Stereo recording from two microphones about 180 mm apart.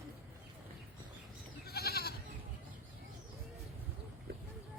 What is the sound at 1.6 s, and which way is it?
Goat, 60° left (ahead or behind).